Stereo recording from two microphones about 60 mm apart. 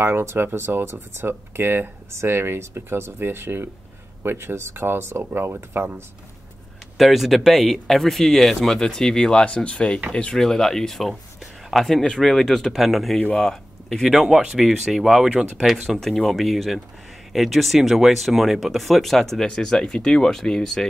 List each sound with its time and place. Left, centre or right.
0.0 s speech: right
7.0 s speech: centre
13.4 s a sound: centre
14.0 s speech: centre